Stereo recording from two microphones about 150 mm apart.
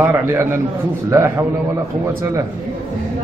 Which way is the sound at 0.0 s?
15° right (ahead or behind).